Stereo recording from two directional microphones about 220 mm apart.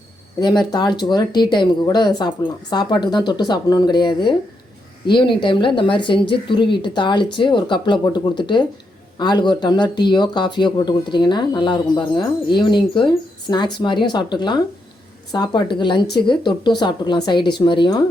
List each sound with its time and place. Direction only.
0.3 s speech: 20° left (ahead or behind)